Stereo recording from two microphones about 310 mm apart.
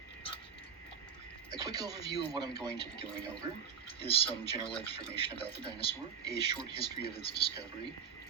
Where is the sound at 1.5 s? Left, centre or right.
Centre.